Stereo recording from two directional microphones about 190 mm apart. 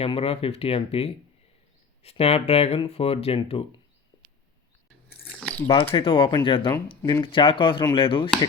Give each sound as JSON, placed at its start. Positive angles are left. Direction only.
{"t": 0.0, "sound": "speech", "side_deg": 30}
{"t": 5.4, "sound": "a sound", "side_deg": 10}
{"t": 5.6, "sound": "speech", "side_deg": 25}